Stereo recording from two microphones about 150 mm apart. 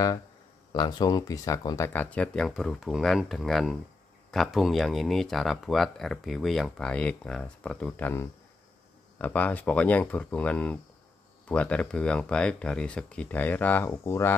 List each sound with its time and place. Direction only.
0.7 s speech: 30° left (ahead or behind)
1.9 s speech: 10° left (ahead or behind)